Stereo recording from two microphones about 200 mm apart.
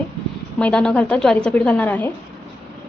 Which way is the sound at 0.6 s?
5° left (ahead or behind).